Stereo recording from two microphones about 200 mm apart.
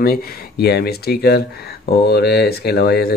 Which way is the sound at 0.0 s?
50° left (ahead or behind).